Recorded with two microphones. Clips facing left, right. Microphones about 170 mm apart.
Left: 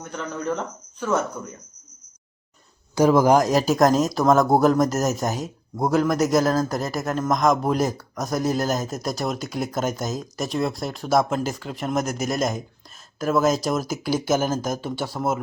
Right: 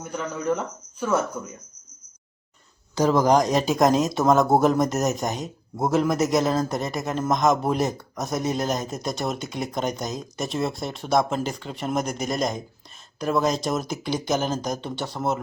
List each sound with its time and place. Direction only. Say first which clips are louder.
0.0 s speech: right 1 dB; 5° right (ahead or behind)
2.9 s speech: left 3 dB; 10° left (ahead or behind)